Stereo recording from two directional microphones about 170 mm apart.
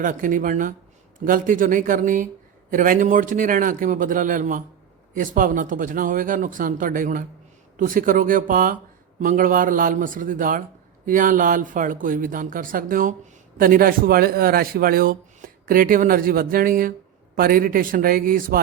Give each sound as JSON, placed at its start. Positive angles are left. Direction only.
{"t": 0.0, "sound": "speech", "side_deg": -50}